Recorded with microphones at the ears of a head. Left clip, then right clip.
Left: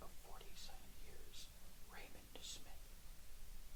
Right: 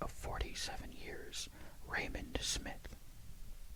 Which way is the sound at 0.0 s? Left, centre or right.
Right.